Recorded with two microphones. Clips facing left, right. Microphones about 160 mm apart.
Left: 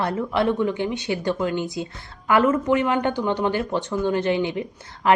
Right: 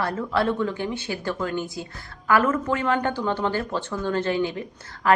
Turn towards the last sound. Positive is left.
turn(degrees=20)  # may be behind; listen again after turning